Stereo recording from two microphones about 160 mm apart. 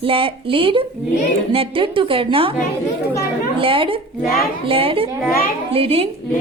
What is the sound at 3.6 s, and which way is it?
A woman's voice, 35° right (ahead or behind).